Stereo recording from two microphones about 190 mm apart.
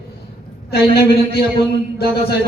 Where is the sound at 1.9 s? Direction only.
55° left (ahead or behind).